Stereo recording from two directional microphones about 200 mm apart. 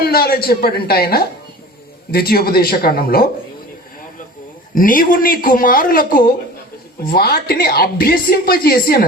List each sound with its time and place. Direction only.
0.0 s speech: 50° left (ahead or behind)
4.7 s speech: 45° left (ahead or behind)